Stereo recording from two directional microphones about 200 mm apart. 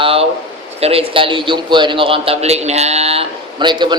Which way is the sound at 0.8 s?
30° right (ahead or behind).